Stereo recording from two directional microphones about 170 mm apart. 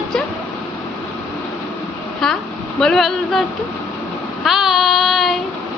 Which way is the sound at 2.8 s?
Centre (ahead or behind).